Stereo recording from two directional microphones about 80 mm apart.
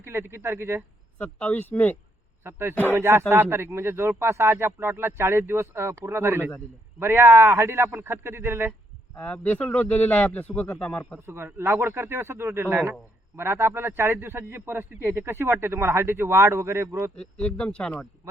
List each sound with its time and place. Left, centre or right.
0.0 s speech: right
1.2 s a man's voice: left
2.4 s a man's voice: right
9.1 s a man's voice: centre
11.3 s a man's voice: right
17.2 s speech: centre